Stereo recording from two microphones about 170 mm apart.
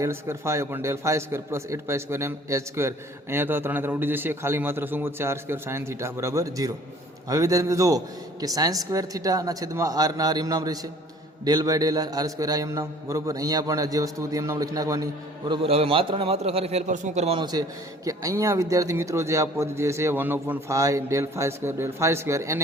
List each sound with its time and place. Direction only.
0.0 s a man's voice: 15° right (ahead or behind)
15.4 s a man's voice: 30° right (ahead or behind)
17.4 s a man's voice: 20° right (ahead or behind)